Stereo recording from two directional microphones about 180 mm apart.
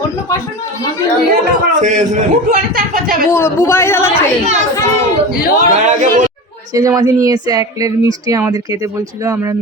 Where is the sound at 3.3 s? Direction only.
15° left (ahead or behind).